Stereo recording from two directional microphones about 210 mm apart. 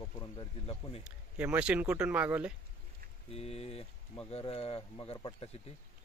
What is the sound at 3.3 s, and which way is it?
Speech, 30° left (ahead or behind).